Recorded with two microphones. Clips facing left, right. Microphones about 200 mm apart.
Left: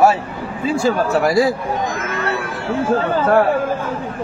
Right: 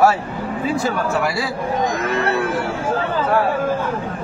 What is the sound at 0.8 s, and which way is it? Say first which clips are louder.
Speech: left 4 dB; 40° left (ahead or behind).